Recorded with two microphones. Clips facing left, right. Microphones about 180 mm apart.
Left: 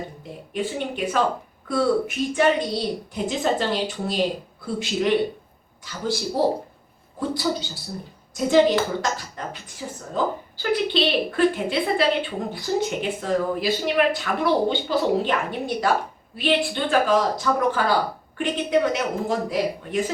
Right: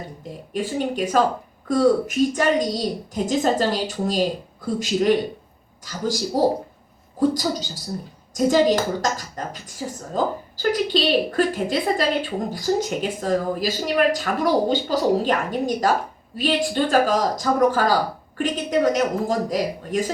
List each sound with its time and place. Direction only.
0.5 s a woman's voice: 40° right (ahead or behind)